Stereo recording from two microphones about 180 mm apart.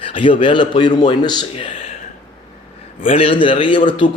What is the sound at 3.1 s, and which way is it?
Speech, 30° left (ahead or behind).